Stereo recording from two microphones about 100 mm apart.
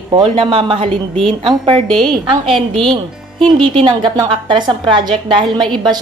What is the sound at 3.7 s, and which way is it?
A woman's voice, 55° right (ahead or behind).